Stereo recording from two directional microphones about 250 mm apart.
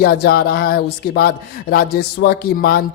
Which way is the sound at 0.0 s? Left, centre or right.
Left.